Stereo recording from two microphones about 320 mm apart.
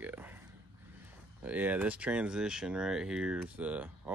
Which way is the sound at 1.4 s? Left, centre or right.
Centre.